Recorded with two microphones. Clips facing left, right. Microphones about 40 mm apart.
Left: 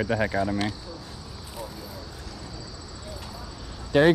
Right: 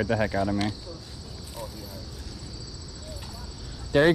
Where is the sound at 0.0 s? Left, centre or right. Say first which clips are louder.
Even; centre.